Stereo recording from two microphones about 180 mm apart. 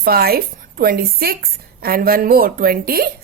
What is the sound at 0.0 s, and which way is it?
A woman's voice, 60° right (ahead or behind).